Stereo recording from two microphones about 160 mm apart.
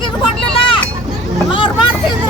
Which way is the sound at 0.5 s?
35° left (ahead or behind).